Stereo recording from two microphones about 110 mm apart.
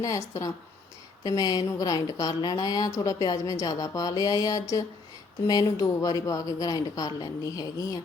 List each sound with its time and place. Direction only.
0.0 s a woman's voice: 30° left (ahead or behind)